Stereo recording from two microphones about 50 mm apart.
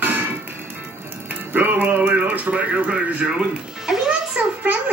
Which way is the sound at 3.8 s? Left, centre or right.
Centre.